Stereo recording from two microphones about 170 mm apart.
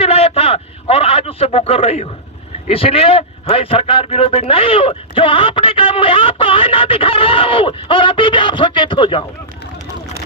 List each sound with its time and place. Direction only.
0.0 s a man's voice: 35° left (ahead or behind)